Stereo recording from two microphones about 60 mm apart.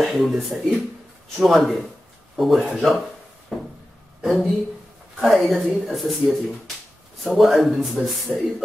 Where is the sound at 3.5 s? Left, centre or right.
Centre.